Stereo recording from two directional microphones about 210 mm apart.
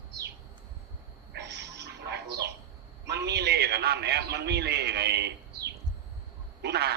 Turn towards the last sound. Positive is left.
turn(degrees=-50)  # may be behind; listen again after turning